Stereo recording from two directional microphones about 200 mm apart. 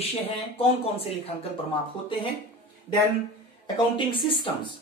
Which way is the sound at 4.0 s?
25° left (ahead or behind).